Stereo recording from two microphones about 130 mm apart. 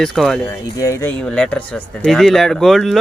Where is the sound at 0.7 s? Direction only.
25° left (ahead or behind).